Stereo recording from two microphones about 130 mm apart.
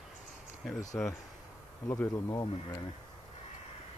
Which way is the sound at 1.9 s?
25° left (ahead or behind).